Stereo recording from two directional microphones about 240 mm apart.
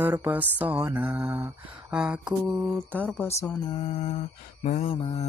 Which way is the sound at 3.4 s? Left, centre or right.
Centre.